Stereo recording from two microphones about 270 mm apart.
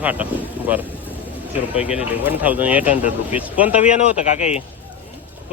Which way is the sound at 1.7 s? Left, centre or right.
Centre.